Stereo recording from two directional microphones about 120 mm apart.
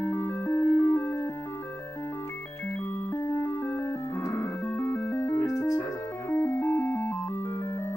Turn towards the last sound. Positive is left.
turn(degrees=15)  # may be behind; listen again after turning